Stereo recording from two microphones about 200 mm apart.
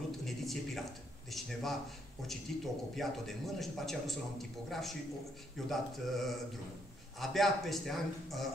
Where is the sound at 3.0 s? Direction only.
Centre (ahead or behind).